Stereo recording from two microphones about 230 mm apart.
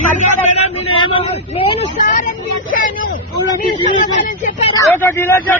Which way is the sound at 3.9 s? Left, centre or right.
Left.